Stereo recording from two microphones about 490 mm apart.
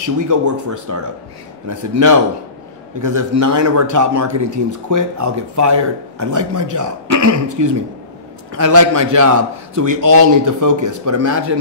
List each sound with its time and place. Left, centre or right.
0.0 s a man's voice: right